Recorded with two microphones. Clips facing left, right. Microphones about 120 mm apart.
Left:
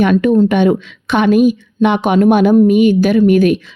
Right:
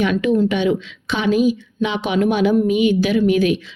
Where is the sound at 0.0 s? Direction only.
50° left (ahead or behind).